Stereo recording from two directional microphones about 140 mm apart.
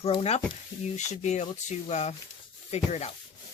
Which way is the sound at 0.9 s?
55° left (ahead or behind).